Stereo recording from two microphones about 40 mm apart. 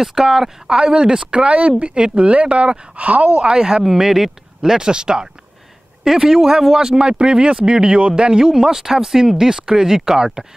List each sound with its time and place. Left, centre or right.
0.0 s speech: centre
0.7 s speech: right
3.3 s speech: centre
3.8 s speech: centre